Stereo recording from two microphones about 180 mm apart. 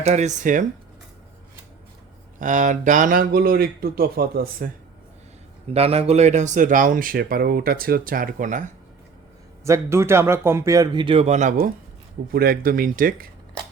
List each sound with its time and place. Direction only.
0.0 s speech: 40° right (ahead or behind)
2.4 s speech: 45° right (ahead or behind)
5.7 s speech: 35° right (ahead or behind)
9.6 s speech: 15° right (ahead or behind)
11.0 s speech: 35° right (ahead or behind)
12.3 s speech: 55° right (ahead or behind)